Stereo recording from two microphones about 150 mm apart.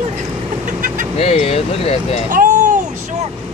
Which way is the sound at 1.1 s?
45° left (ahead or behind).